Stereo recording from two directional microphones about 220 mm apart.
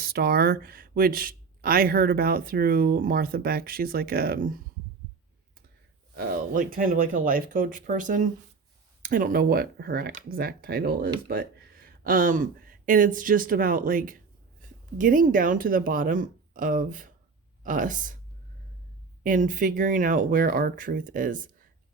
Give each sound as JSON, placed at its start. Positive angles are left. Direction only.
{"t": 0.0, "sound": "speech", "side_deg": -45}
{"t": 6.1, "sound": "speech", "side_deg": -40}
{"t": 19.2, "sound": "speech", "side_deg": -35}